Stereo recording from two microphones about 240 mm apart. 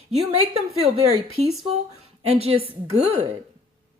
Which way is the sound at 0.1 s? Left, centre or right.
Right.